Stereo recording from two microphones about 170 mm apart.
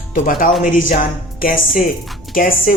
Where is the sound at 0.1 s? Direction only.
55° left (ahead or behind).